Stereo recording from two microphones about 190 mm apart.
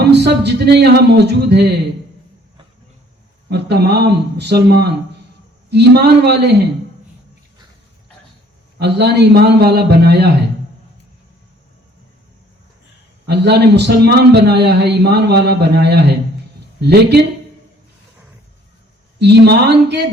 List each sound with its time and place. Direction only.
0.1 s a man's voice: 60° right (ahead or behind)
3.5 s a man's voice: 60° right (ahead or behind)
8.8 s a man's voice: 60° right (ahead or behind)
13.2 s a man's voice: 60° right (ahead or behind)
19.2 s a man's voice: 60° right (ahead or behind)